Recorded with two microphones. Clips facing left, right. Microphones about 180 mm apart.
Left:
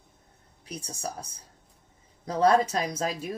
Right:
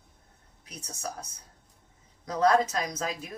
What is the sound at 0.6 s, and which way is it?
Speech, 30° left (ahead or behind).